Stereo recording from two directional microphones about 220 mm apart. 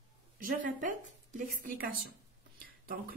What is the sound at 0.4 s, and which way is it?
Speech, 40° right (ahead or behind).